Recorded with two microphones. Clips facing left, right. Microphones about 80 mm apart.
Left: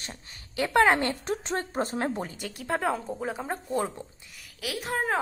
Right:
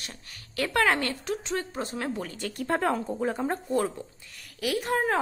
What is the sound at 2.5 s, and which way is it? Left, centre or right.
A woman's voice, centre.